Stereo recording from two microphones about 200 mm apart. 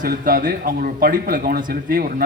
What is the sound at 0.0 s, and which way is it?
Speech, 45° right (ahead or behind).